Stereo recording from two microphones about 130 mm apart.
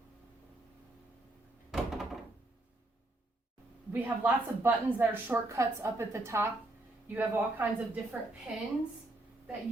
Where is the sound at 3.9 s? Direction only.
15° right (ahead or behind).